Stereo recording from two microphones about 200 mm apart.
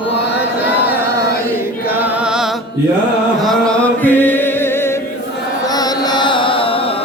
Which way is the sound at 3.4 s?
Centre (ahead or behind).